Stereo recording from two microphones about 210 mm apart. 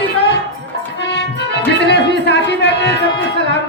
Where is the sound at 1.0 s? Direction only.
55° left (ahead or behind).